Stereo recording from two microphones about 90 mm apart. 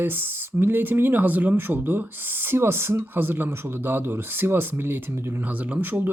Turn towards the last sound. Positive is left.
turn(degrees=-20)  # may be behind; listen again after turning